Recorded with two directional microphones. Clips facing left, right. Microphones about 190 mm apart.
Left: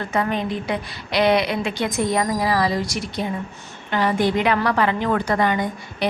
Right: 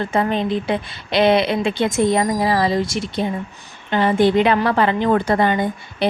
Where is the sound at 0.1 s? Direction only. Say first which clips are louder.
Right 2 dB; 25° right (ahead or behind).